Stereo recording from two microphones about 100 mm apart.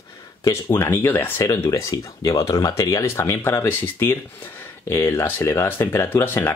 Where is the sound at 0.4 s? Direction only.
30° left (ahead or behind).